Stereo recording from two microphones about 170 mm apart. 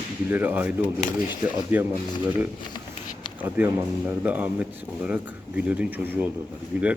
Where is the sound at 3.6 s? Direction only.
15° right (ahead or behind).